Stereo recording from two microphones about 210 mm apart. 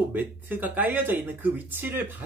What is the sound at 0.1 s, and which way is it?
Speech, 10° right (ahead or behind).